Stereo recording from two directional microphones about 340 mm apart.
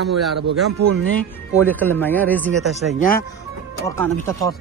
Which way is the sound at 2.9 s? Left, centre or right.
Left.